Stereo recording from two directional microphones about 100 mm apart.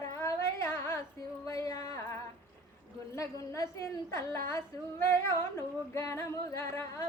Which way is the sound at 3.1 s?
35° left (ahead or behind).